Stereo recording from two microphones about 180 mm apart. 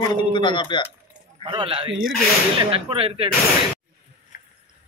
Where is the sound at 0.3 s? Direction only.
25° left (ahead or behind).